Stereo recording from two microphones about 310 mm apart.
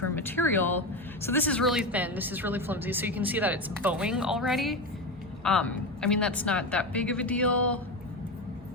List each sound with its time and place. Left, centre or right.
0.1 s a woman's voice: centre